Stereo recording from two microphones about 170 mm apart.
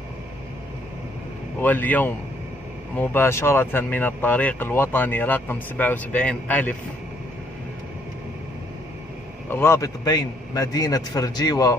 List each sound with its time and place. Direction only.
1.6 s speech: 10° left (ahead or behind)
9.5 s a man's voice: 15° left (ahead or behind)